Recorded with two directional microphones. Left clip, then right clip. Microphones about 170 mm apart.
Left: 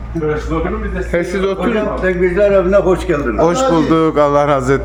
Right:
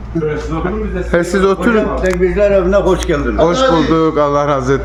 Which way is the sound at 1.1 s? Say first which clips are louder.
Right 4 dB; 30° right (ahead or behind).